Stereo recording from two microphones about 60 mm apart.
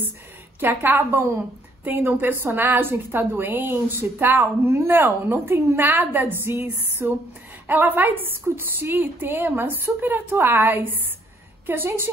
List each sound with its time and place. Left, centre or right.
0.6 s a woman's voice: right